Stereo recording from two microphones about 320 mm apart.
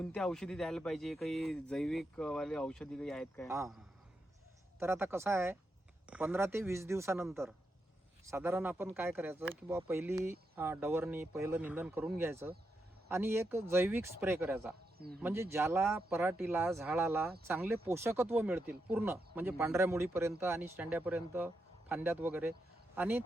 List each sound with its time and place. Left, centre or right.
0.0 s speech: centre
3.5 s speech: centre
4.8 s speech: centre
14.9 s speech: right
15.2 s speech: centre